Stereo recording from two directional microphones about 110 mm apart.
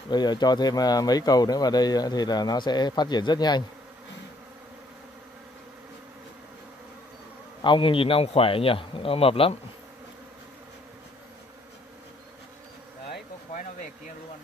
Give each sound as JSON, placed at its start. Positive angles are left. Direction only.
{"t": 0.1, "sound": "speech", "side_deg": 40}
{"t": 7.6, "sound": "speech", "side_deg": 50}